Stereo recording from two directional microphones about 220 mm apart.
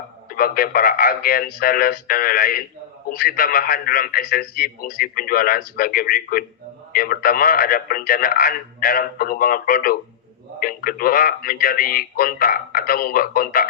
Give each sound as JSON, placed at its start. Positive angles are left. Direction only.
{"t": 0.3, "sound": "a man's voice", "side_deg": 40}